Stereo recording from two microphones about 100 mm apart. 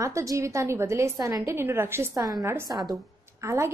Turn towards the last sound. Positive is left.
turn(degrees=-30)  # may be behind; listen again after turning